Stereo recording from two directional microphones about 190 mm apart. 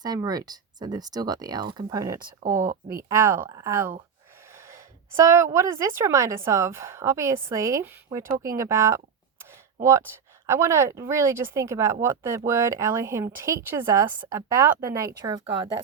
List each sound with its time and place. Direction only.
0.0 s speech: 20° right (ahead or behind)
10.4 s speech: 15° right (ahead or behind)